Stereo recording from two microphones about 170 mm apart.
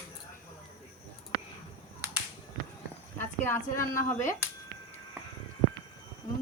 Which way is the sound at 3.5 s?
15° left (ahead or behind).